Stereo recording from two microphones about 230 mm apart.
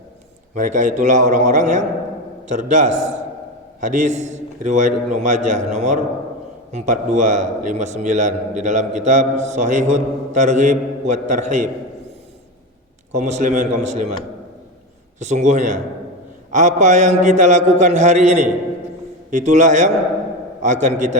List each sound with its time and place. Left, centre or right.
0.5 s a man's voice: right
13.1 s a man's voice: right
15.2 s a man's voice: right